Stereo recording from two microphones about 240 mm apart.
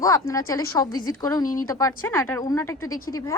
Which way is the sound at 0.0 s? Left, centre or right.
Centre.